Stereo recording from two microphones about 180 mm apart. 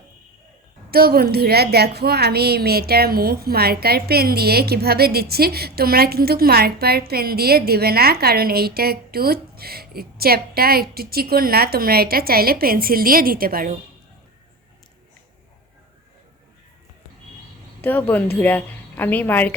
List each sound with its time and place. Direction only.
0.9 s a woman's voice: 55° right (ahead or behind)
17.8 s speech: 10° left (ahead or behind)